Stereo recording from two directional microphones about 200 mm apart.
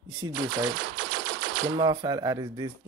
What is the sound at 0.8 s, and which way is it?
Typewriter, 60° right (ahead or behind).